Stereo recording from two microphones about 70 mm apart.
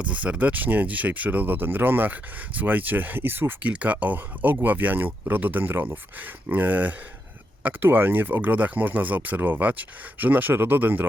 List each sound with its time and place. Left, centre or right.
0.0 s speech: centre